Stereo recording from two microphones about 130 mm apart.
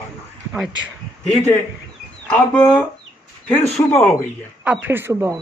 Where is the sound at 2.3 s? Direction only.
5° left (ahead or behind).